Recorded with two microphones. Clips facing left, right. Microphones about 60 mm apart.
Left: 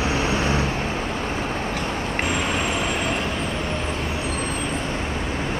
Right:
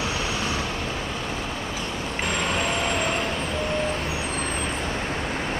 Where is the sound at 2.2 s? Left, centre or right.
Centre.